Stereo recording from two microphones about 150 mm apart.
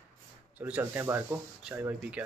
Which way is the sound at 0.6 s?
10° right (ahead or behind).